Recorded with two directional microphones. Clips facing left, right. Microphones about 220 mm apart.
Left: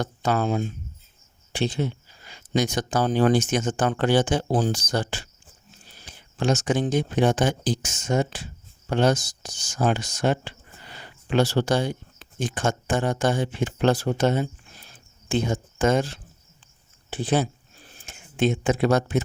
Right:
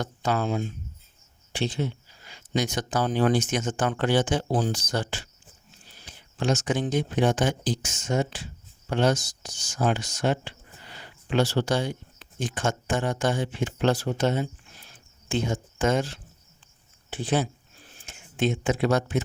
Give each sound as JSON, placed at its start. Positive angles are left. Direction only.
{"t": 0.0, "sound": "speech", "side_deg": 50}
{"t": 6.7, "sound": "speech", "side_deg": 30}
{"t": 7.8, "sound": "speech", "side_deg": 50}
{"t": 15.8, "sound": "speech", "side_deg": 40}
{"t": 17.1, "sound": "speech", "side_deg": 35}
{"t": 18.0, "sound": "speech", "side_deg": 50}